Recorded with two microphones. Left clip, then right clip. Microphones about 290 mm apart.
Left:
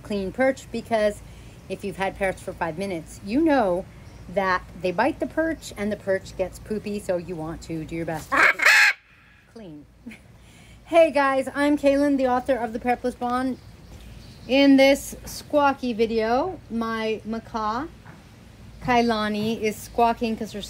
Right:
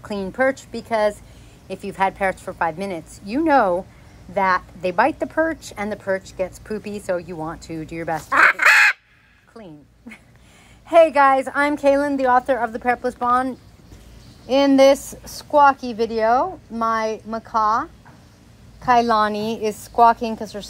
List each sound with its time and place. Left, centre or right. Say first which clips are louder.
0.1 s a woman's voice: right 2 dB; centre
9.5 s a sound: right 2 dB; centre
10.9 s a woman's voice: right 5 dB; centre
18.9 s a woman's voice: right 6 dB; centre